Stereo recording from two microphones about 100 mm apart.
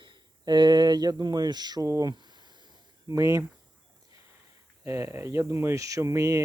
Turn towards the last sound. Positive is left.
turn(degrees=-30)  # may be behind; listen again after turning